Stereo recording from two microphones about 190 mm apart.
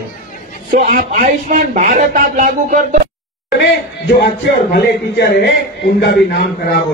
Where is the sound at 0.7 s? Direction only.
40° right (ahead or behind).